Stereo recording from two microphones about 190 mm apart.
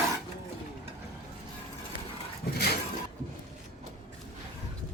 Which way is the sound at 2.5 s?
60° left (ahead or behind).